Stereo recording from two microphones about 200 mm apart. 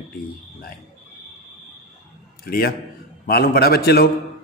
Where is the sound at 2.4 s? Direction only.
50° left (ahead or behind).